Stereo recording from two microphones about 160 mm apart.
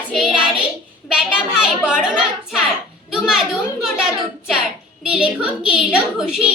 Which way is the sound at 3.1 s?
5° right (ahead or behind).